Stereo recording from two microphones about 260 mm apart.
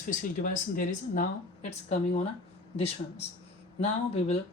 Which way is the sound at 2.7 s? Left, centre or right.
Left.